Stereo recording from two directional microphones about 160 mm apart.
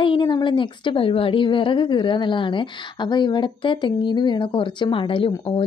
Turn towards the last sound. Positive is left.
turn(degrees=35)  # may be behind; listen again after turning